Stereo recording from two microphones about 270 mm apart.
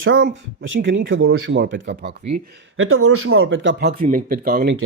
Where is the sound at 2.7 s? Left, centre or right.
Right.